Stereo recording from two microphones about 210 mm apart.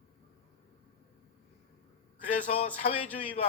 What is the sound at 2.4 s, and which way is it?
Speech, 35° left (ahead or behind).